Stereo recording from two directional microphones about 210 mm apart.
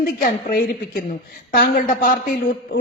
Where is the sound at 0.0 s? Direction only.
45° left (ahead or behind).